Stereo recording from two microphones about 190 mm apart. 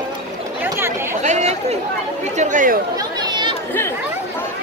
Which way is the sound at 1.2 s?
40° right (ahead or behind).